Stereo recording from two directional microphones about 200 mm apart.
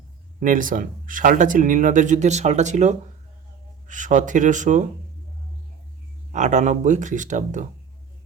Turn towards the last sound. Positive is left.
turn(degrees=-40)  # may be behind; listen again after turning